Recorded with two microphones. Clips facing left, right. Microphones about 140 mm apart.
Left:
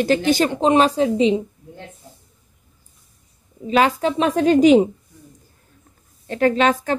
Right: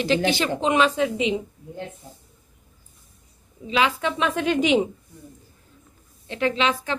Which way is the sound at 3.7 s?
45° left (ahead or behind).